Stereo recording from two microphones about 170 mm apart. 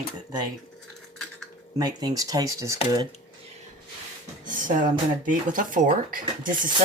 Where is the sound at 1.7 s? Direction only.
20° right (ahead or behind).